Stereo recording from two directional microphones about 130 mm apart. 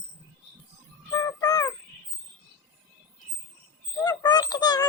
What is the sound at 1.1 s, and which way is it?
Music, 25° left (ahead or behind).